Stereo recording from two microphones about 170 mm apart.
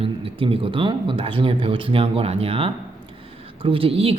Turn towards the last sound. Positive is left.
turn(degrees=-35)  # may be behind; listen again after turning